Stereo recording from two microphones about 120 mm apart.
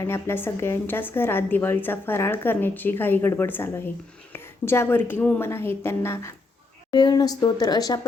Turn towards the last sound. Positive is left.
turn(degrees=30)  # may be behind; listen again after turning